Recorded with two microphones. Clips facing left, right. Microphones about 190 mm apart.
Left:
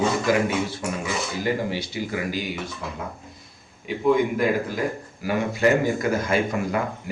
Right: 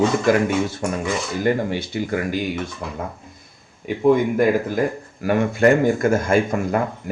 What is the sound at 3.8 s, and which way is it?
Speech, 50° right (ahead or behind).